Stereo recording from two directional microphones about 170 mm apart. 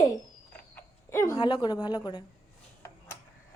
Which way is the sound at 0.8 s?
15° left (ahead or behind).